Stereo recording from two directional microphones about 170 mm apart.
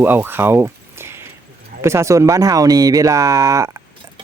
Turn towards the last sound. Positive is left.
turn(degrees=-20)  # may be behind; listen again after turning